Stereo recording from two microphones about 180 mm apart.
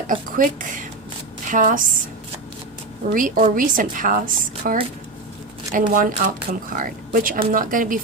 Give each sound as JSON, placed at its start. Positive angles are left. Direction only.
{"t": 0.1, "sound": "speech", "side_deg": -50}
{"t": 3.1, "sound": "speech", "side_deg": -50}
{"t": 5.9, "sound": "speech", "side_deg": -50}